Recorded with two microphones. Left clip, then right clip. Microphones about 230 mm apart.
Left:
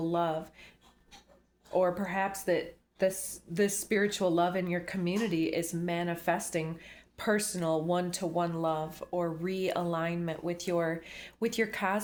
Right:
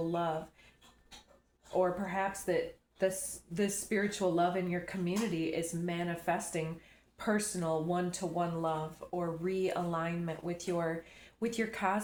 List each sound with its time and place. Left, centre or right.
1.7 s speech: left